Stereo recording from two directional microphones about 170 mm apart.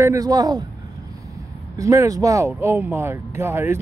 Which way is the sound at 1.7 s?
20° right (ahead or behind).